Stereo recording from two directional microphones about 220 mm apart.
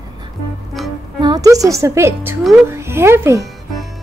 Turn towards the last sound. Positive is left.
turn(degrees=-10)  # may be behind; listen again after turning